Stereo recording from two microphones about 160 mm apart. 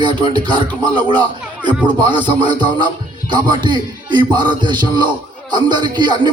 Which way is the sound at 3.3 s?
30° right (ahead or behind).